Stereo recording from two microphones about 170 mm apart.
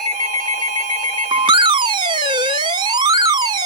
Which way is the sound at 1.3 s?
30° right (ahead or behind).